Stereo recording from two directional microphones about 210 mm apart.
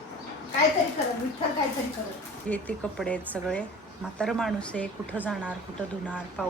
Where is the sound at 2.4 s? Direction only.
5° left (ahead or behind).